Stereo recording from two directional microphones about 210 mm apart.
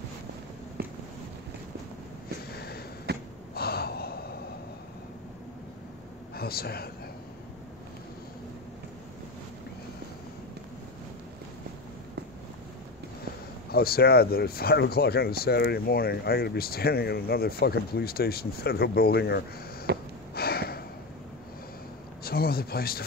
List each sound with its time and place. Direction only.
2.5 s a sound: 50° left (ahead or behind)
3.1 s gasp: 50° right (ahead or behind)
3.5 s gasp: 50° left (ahead or behind)
6.3 s a man's voice: 45° left (ahead or behind)
13.7 s speech: 45° left (ahead or behind)
19.9 s gasp: 55° right (ahead or behind)
20.3 s a sound: 50° left (ahead or behind)
22.2 s speech: 45° left (ahead or behind)